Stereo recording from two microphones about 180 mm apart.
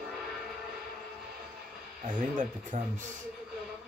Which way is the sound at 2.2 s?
45° right (ahead or behind).